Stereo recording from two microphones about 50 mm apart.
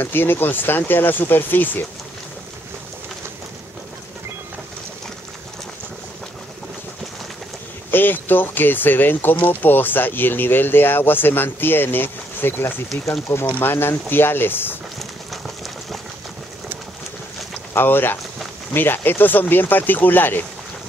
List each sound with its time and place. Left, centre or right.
0.0 s speech: left
7.9 s speech: left
12.9 s speech: left
13.3 s speech: left
17.7 s speech: left